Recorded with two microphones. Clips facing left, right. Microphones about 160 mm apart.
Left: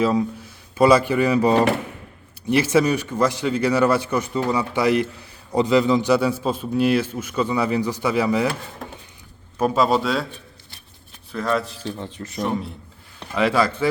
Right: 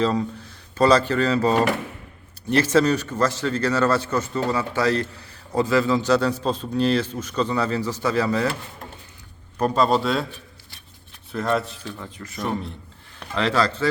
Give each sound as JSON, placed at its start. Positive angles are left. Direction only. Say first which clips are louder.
{"t": 0.0, "sound": "a man's voice", "louder": "left 2 dB", "side_deg": 10}
{"t": 9.6, "sound": "a man's voice", "louder": "left 1 dB", "side_deg": 5}
{"t": 11.3, "sound": "a man's voice", "louder": "even", "side_deg": 0}
{"t": 11.8, "sound": "speech", "louder": "left 5 dB", "side_deg": 30}
{"t": 12.5, "sound": "a man's voice", "louder": "right 1 dB", "side_deg": 5}